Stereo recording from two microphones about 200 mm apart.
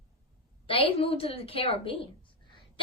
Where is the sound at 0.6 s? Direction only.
25° left (ahead or behind).